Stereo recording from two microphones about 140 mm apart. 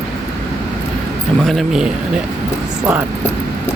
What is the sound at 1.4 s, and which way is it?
Speech, centre (ahead or behind).